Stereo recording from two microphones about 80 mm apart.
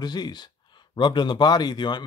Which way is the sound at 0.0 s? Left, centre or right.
Left.